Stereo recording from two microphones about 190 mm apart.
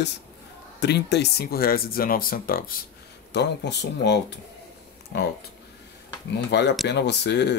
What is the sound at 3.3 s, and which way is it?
Speech, 65° left (ahead or behind).